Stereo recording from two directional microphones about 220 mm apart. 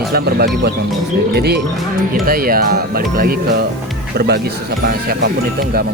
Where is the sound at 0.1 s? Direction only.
45° right (ahead or behind).